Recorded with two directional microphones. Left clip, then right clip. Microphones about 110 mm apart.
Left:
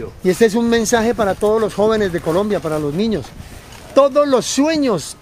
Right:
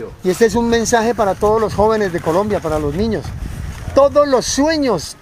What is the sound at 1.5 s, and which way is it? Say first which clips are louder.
Speech: right 1 dB; 15° left (ahead or behind).